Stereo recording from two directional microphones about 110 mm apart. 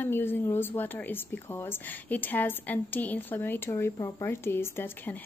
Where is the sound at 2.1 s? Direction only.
15° left (ahead or behind).